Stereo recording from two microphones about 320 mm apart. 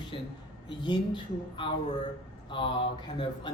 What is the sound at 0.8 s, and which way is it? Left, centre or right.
Speech, centre.